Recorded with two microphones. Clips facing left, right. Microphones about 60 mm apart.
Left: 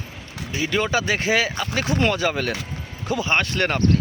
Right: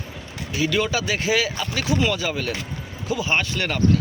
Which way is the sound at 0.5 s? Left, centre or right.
Left.